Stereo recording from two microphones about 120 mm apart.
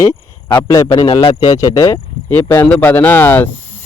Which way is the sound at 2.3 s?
20° left (ahead or behind).